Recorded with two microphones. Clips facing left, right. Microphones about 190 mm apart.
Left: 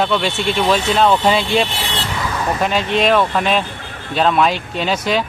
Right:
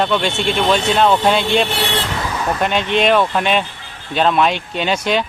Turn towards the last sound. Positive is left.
turn(degrees=0)  # may be behind; listen again after turning